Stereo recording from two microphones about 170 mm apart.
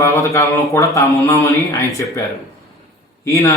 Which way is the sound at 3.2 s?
15° left (ahead or behind).